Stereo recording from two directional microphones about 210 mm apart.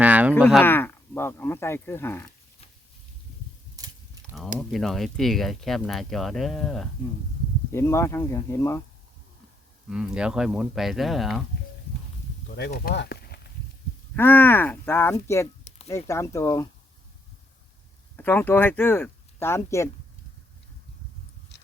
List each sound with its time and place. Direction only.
0.0 s a sound: 5° right (ahead or behind)
0.5 s speech: 10° left (ahead or behind)
3.8 s a sound: 15° right (ahead or behind)
4.7 s speech: centre (ahead or behind)
7.7 s speech: 10° left (ahead or behind)
9.9 s speech: 5° right (ahead or behind)
12.5 s speech: 50° left (ahead or behind)
14.2 s speech: 10° left (ahead or behind)
18.2 s speech: 10° left (ahead or behind)
21.5 s a sound: 55° left (ahead or behind)